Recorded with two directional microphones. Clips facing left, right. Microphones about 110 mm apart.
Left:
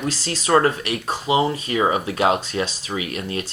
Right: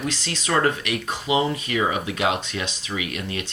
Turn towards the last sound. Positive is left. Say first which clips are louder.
# left 2 dB
turn(degrees=35)  # may be behind; listen again after turning